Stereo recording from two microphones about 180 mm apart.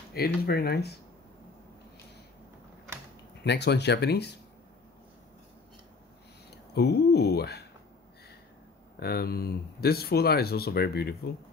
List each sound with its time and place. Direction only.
0.1 s speech: 60° left (ahead or behind)
3.4 s speech: 70° left (ahead or behind)
6.7 s speech: 65° left (ahead or behind)
9.0 s speech: 60° left (ahead or behind)